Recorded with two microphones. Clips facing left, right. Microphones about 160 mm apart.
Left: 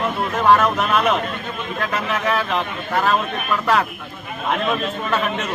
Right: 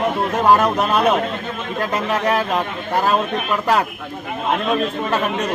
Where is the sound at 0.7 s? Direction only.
35° right (ahead or behind).